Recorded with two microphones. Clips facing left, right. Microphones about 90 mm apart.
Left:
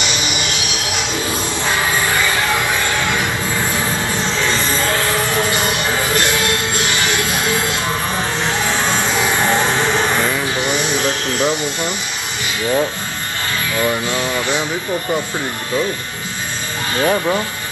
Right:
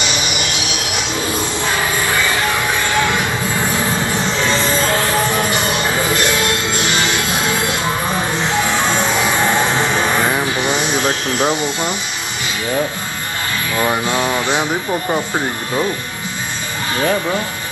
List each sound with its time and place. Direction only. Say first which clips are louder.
0.1 s train: right 1 dB; 20° right (ahead or behind)
5.5 s music: right 1 dB; 20° right (ahead or behind)
11.3 s speech: right 1 dB; 20° right (ahead or behind)
13.8 s speech: right 4 dB; 25° right (ahead or behind)